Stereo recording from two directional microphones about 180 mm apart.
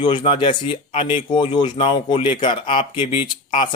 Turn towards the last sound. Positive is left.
turn(degrees=25)  # may be behind; listen again after turning